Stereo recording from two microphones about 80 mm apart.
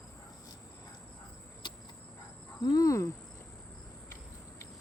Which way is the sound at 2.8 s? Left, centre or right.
Left.